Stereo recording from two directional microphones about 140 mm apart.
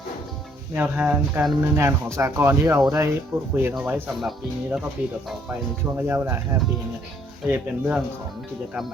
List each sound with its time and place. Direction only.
0.8 s speech: 10° right (ahead or behind)
4.2 s speech: centre (ahead or behind)
6.0 s speech: 15° right (ahead or behind)